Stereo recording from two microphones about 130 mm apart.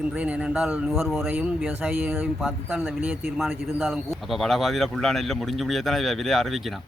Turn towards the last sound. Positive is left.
turn(degrees=0)  # may be behind; listen again after turning